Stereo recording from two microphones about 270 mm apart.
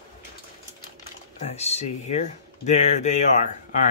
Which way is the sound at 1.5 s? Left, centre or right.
Left.